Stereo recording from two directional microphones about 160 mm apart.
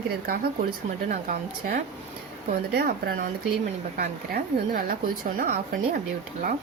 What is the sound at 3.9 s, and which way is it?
A woman's voice, 60° right (ahead or behind).